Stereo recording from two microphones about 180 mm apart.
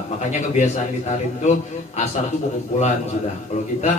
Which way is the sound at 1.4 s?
40° left (ahead or behind).